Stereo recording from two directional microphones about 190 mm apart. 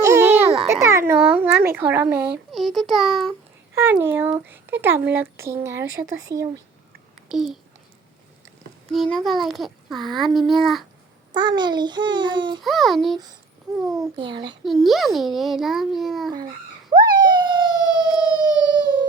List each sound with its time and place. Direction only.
0.0 s a sound: 15° right (ahead or behind)
0.7 s speech: 15° right (ahead or behind)
2.5 s a child's voice: centre (ahead or behind)
3.8 s speech: 10° right (ahead or behind)
7.3 s a child's voice: centre (ahead or behind)
8.9 s a child's voice: centre (ahead or behind)
11.3 s a child's voice: 25° right (ahead or behind)
12.6 s a child's voice: centre (ahead or behind)
14.2 s a child's voice: 25° right (ahead or behind)
14.6 s a child's voice: centre (ahead or behind)
16.3 s police car: 20° right (ahead or behind)